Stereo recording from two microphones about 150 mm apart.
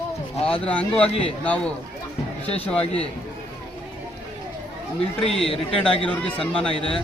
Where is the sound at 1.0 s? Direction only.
40° left (ahead or behind).